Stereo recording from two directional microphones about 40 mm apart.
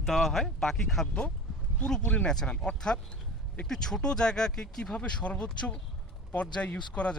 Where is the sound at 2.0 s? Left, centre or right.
Left.